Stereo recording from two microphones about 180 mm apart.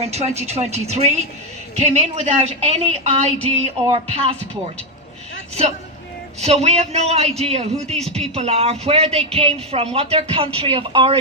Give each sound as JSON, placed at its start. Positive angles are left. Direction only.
{"t": 0.0, "sound": "speech", "side_deg": -35}
{"t": 6.4, "sound": "speech", "side_deg": -35}